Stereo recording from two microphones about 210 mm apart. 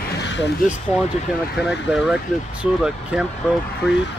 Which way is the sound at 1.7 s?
5° right (ahead or behind).